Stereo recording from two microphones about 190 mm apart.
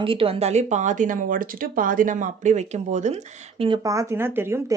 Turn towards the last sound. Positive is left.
turn(degrees=-15)  # may be behind; listen again after turning